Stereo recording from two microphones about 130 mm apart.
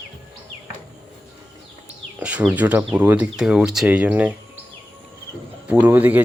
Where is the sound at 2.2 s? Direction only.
10° right (ahead or behind).